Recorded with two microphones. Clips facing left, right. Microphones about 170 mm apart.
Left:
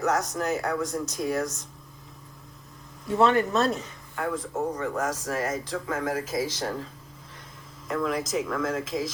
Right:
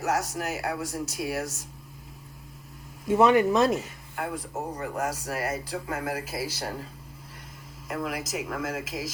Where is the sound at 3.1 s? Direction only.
15° right (ahead or behind).